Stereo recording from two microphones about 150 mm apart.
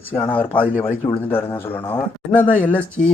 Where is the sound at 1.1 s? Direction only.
15° left (ahead or behind).